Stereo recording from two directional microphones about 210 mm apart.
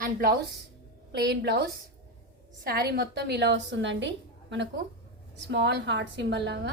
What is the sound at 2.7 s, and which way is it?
A woman's voice, 45° right (ahead or behind).